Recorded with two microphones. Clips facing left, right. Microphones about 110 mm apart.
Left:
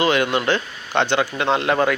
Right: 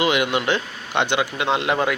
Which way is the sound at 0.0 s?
15° right (ahead or behind).